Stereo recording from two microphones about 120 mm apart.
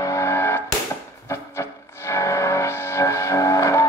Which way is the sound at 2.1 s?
25° left (ahead or behind).